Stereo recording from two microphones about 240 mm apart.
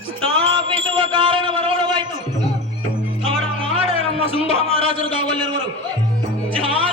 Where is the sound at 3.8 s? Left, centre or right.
Left.